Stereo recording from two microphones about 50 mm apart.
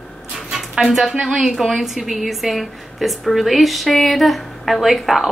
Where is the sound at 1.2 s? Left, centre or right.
Centre.